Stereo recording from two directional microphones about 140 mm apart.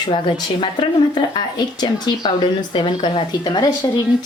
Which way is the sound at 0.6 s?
35° left (ahead or behind).